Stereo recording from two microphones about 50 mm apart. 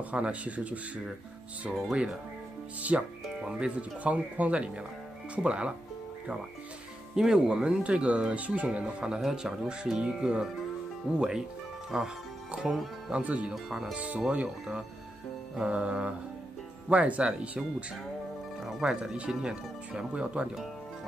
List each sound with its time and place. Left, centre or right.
0.1 s speech: right
1.7 s speech: centre
7.2 s speech: centre
12.4 s music: centre
13.1 s speech: right
13.5 s speech: centre
13.9 s speech: right
15.6 s speech: right
18.8 s speech: centre
19.1 s speech: right